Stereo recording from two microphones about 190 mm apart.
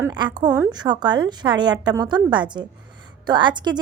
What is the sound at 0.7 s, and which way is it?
A woman's voice, 25° right (ahead or behind).